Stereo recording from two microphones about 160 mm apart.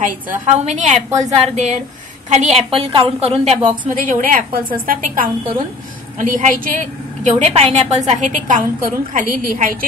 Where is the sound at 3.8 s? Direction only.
55° right (ahead or behind).